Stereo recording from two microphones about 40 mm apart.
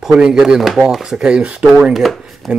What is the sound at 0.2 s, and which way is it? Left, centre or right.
Speech, centre.